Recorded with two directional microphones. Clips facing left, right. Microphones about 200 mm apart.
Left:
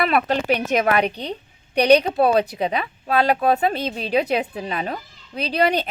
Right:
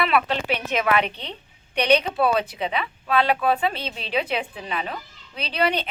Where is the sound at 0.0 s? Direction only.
45° left (ahead or behind).